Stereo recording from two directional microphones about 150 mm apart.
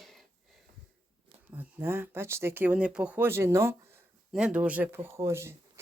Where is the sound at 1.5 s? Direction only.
15° right (ahead or behind).